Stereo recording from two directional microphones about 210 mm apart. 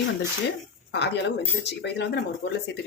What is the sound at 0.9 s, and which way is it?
A woman's voice, 55° left (ahead or behind).